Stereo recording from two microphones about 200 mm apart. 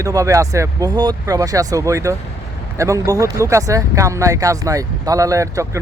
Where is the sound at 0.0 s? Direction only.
15° right (ahead or behind).